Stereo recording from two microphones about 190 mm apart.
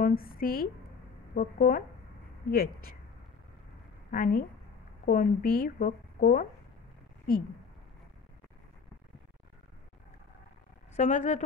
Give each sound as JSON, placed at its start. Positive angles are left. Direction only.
{"t": 0.0, "sound": "speech", "side_deg": 50}
{"t": 4.1, "sound": "speech", "side_deg": 50}
{"t": 11.0, "sound": "a woman's voice", "side_deg": 40}